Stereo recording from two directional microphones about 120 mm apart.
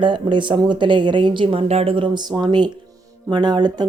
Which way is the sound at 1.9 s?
40° right (ahead or behind).